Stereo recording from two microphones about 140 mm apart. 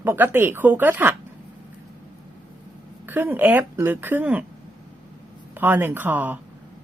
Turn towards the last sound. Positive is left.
turn(degrees=-10)  # may be behind; listen again after turning